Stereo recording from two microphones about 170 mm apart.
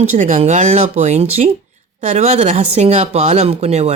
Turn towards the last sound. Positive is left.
turn(degrees=-35)  # may be behind; listen again after turning